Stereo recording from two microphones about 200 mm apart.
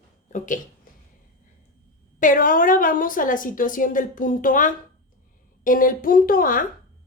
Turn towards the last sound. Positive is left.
turn(degrees=45)  # may be behind; listen again after turning